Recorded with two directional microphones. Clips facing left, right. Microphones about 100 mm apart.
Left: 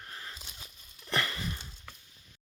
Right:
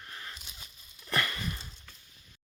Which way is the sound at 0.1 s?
30° left (ahead or behind).